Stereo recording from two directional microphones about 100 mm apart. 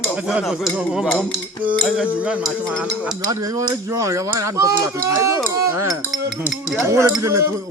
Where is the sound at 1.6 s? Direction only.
10° right (ahead or behind).